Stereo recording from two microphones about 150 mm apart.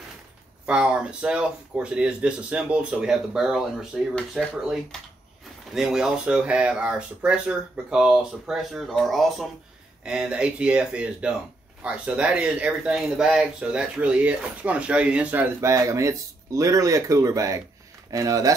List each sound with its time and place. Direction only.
0.7 s speech: 5° right (ahead or behind); by 18.5 s 25° right (ahead or behind)